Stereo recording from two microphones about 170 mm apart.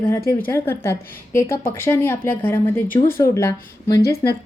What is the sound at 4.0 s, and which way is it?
Speech, 65° left (ahead or behind).